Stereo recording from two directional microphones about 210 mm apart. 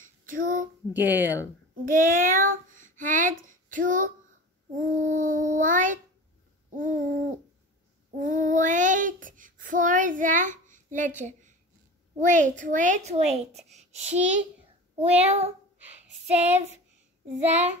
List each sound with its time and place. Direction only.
0.0 s child singing: 40° right (ahead or behind)
0.9 s speech: 10° right (ahead or behind)
1.9 s child singing: 40° right (ahead or behind)
3.7 s a woman's voice: 40° right (ahead or behind)
8.2 s child singing: 35° right (ahead or behind)
12.3 s a woman's voice: 35° right (ahead or behind)